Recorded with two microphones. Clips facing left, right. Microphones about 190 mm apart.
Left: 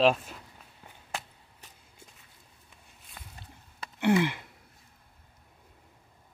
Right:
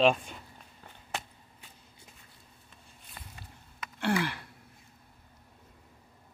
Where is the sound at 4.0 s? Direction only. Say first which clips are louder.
Left 5 dB; 20° left (ahead or behind).